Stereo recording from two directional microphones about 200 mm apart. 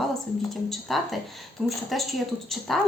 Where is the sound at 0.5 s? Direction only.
Centre (ahead or behind).